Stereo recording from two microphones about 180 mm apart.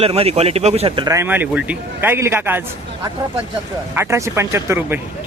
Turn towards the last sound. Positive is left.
turn(degrees=-10)  # may be behind; listen again after turning